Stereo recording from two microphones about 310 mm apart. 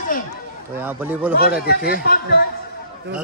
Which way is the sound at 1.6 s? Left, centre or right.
Left.